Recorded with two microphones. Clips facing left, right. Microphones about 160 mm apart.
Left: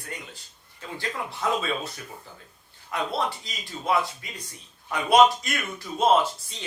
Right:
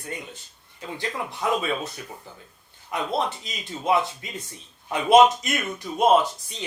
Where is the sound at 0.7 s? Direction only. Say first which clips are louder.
Right 2 dB; 20° right (ahead or behind).